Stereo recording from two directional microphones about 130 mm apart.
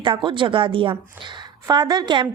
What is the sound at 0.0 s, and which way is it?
A woman's voice, 40° right (ahead or behind).